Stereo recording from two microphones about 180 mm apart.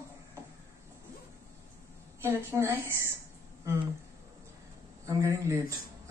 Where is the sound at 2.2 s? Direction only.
15° right (ahead or behind).